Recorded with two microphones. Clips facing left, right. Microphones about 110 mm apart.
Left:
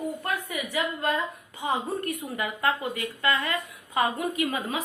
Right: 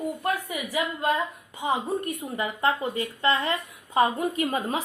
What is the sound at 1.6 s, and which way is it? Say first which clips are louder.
A woman's voice: right 2 dB; 20° right (ahead or behind).